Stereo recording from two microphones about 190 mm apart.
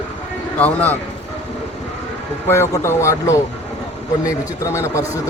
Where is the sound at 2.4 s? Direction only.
15° left (ahead or behind).